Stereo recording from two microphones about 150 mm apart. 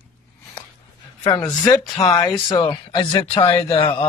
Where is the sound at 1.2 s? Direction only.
25° left (ahead or behind).